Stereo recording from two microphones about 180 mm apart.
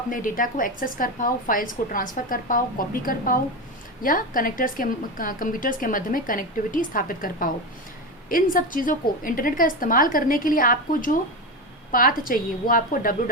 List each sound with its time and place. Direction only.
0.1 s a woman's voice: 50° left (ahead or behind)